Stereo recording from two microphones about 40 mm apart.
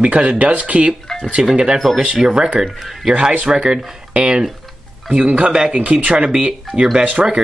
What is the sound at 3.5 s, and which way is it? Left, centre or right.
Speech, centre.